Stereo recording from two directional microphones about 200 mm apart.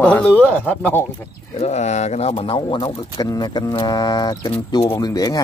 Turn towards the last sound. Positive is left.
turn(degrees=20)  # may be behind; listen again after turning